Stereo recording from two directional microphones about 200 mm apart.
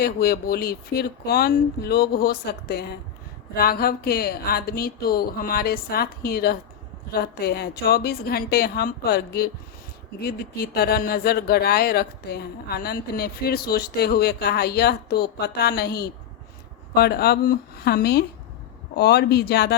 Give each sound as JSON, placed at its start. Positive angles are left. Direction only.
{"t": 0.0, "sound": "speech", "side_deg": 50}